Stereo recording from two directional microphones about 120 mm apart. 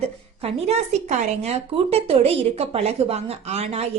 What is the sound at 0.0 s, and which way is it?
A woman's voice, 60° right (ahead or behind).